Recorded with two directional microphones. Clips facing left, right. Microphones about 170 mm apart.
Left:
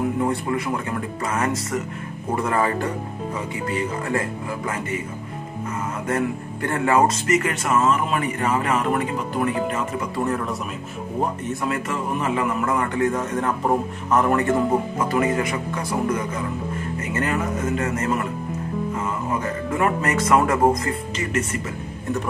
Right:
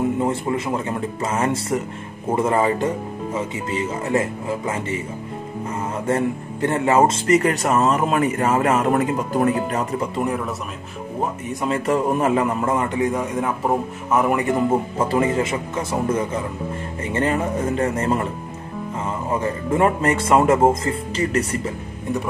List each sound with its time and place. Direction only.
0.2 s speech: 25° right (ahead or behind)
6.0 s speech: 25° right (ahead or behind); by 9.8 s 40° right (ahead or behind)
10.1 s a man's voice: 10° right (ahead or behind)
11.6 s speech: 30° right (ahead or behind)
12.6 s a man's voice: 20° right (ahead or behind)
15.0 s speech: 30° right (ahead or behind)